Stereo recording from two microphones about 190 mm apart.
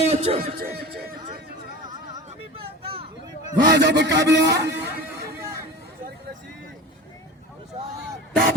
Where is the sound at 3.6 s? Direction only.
65° right (ahead or behind).